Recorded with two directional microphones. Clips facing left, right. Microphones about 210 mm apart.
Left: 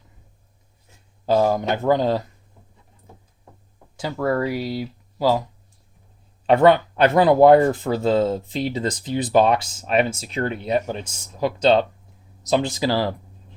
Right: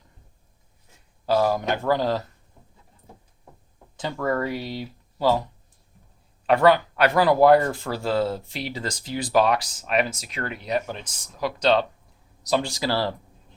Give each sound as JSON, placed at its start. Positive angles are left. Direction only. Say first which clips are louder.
{"t": 1.2, "sound": "speech", "louder": "left 3 dB", "side_deg": 20}
{"t": 3.9, "sound": "speech", "louder": "left 3 dB", "side_deg": 10}
{"t": 6.4, "sound": "speech", "louder": "left 3 dB", "side_deg": 25}